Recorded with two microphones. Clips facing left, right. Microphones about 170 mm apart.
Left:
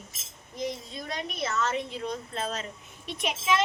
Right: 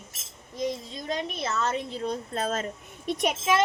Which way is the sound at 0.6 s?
30° right (ahead or behind).